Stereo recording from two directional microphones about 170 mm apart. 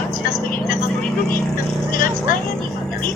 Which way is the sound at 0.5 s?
50° left (ahead or behind).